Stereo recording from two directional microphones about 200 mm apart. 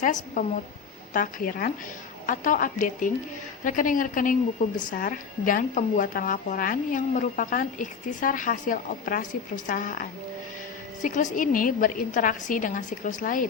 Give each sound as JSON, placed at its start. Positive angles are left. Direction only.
{"t": 0.0, "sound": "a woman's voice", "side_deg": 40}